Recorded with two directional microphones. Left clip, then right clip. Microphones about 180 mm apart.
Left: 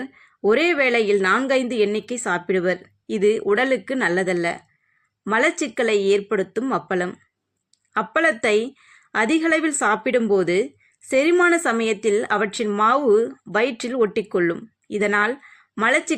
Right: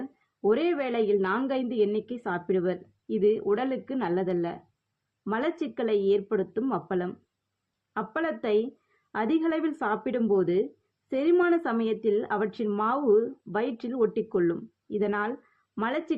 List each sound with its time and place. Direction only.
0.4 s a woman's voice: 25° left (ahead or behind)